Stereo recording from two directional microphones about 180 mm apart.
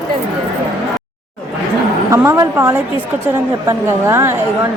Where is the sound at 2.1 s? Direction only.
15° right (ahead or behind).